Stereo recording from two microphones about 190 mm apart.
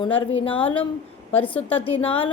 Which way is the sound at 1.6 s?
30° left (ahead or behind).